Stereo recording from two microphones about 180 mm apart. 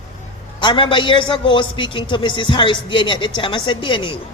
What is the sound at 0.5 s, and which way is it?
Speech, 25° left (ahead or behind).